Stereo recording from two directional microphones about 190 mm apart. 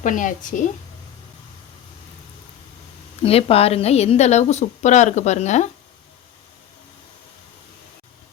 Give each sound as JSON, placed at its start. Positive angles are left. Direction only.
{"t": 0.0, "sound": "a woman's voice", "side_deg": 40}
{"t": 3.2, "sound": "a woman's voice", "side_deg": 30}